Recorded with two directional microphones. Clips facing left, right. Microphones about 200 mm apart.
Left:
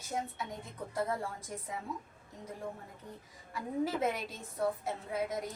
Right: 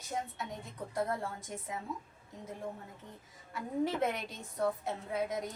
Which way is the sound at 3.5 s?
Centre (ahead or behind).